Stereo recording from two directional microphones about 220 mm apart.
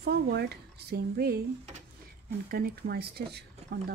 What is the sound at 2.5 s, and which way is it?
Speech, 45° right (ahead or behind).